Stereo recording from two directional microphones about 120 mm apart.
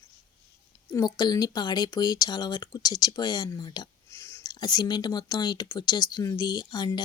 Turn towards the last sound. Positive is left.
turn(degrees=35)  # may be behind; listen again after turning